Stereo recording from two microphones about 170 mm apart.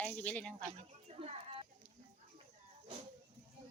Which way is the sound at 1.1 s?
40° right (ahead or behind).